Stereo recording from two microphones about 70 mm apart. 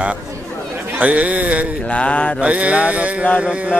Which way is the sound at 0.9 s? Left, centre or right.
Centre.